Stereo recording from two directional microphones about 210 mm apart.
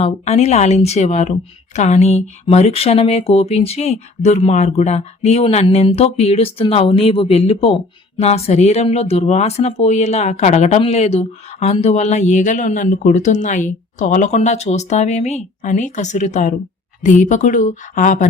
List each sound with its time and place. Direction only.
0.0 s speech: 30° left (ahead or behind)